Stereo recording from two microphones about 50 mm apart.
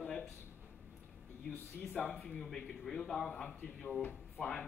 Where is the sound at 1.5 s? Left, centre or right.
Left.